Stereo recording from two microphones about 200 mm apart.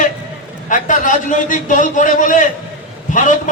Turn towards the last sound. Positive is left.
turn(degrees=40)  # may be behind; listen again after turning